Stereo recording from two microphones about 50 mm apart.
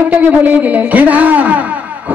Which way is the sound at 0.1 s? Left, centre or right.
Right.